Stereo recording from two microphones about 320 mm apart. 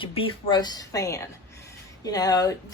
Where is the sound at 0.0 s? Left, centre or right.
Centre.